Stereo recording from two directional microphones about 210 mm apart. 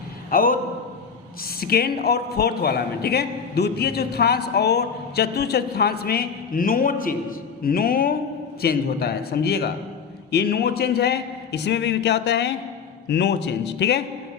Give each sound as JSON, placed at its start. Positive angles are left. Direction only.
{"t": 0.3, "sound": "a man's voice", "side_deg": 45}